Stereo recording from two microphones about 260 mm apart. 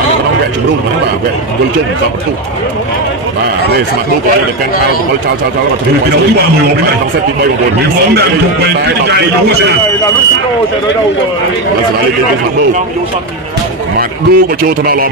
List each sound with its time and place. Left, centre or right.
13.9 s a man's voice: right